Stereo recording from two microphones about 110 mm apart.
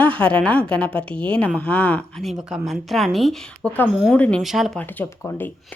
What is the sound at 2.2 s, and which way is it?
A woman's voice, centre (ahead or behind).